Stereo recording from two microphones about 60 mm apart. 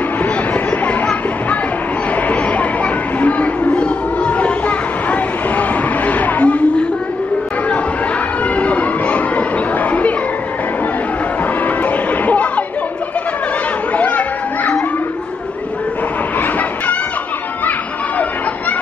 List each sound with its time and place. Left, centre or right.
0.2 s a sound: left
2.2 s chatter: left
8.5 s music: left
9.8 s a sound: left
11.6 s music: left
13.9 s children playing: left
16.3 s chicken: left